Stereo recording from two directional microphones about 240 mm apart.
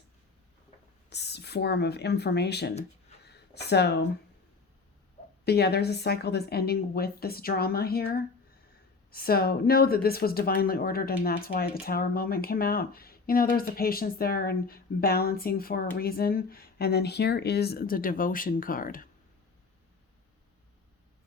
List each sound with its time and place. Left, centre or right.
1.1 s speech: left
5.5 s speech: left